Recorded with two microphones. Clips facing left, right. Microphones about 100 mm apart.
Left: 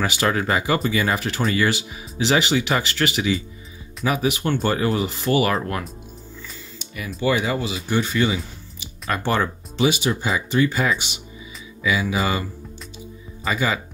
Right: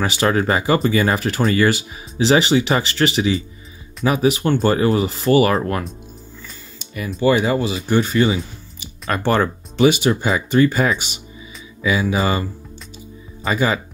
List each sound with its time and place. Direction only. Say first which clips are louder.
0.0 s speech: right 4 dB; 35° right (ahead or behind); by 10.1 s 55° right (ahead or behind)
10.2 s speech: right 4 dB; 45° right (ahead or behind)